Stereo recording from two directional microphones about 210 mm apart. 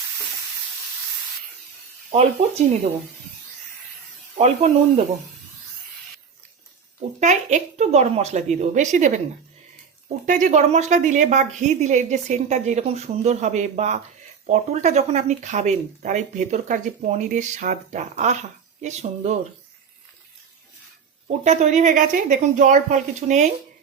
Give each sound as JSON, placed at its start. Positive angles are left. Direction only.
{"t": 2.0, "sound": "speech", "side_deg": -30}
{"t": 4.4, "sound": "speech", "side_deg": -30}
{"t": 7.2, "sound": "speech", "side_deg": -35}
{"t": 10.2, "sound": "speech", "side_deg": -35}
{"t": 21.2, "sound": "speech", "side_deg": -35}